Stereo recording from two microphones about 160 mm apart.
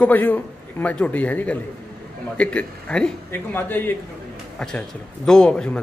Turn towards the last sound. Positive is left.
turn(degrees=5)  # may be behind; listen again after turning